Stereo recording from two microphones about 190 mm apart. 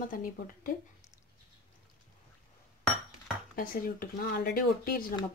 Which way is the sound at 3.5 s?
50° left (ahead or behind).